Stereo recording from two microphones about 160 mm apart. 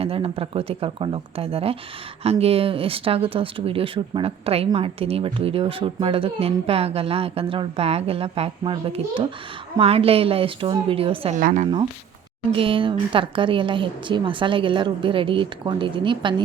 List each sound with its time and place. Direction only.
0.0 s speech: 35° right (ahead or behind)
11.3 s speech: 55° right (ahead or behind)
12.5 s speech: 35° right (ahead or behind)